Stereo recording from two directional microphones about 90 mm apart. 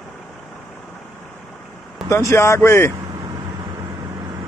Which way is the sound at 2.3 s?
30° left (ahead or behind).